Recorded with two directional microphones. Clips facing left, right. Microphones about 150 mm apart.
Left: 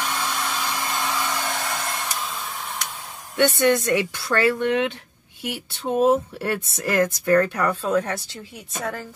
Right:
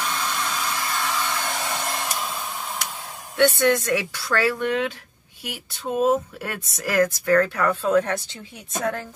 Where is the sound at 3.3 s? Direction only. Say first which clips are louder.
Even; 15° left (ahead or behind).